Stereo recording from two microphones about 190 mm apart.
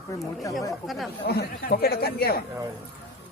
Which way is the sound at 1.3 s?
55° left (ahead or behind).